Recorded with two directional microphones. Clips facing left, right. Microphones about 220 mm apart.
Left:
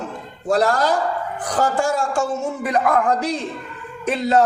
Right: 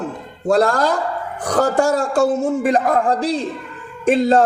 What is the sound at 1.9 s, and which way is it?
Speech, 40° right (ahead or behind).